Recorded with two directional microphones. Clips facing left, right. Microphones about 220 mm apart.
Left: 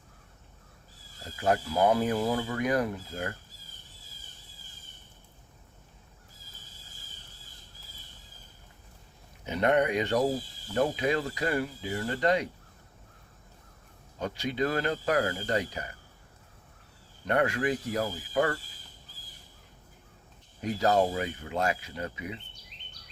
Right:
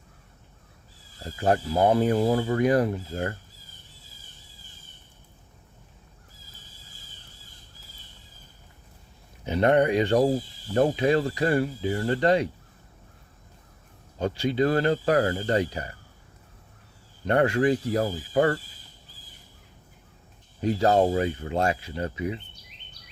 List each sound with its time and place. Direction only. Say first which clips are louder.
1.4 s speech: right 3 dB; 35° right (ahead or behind)
9.5 s speech: right 5 dB; 30° right (ahead or behind)
14.2 s speech: right 6 dB; 30° right (ahead or behind)
17.2 s speech: right 6 dB; 30° right (ahead or behind)
20.6 s speech: right 4 dB; 30° right (ahead or behind)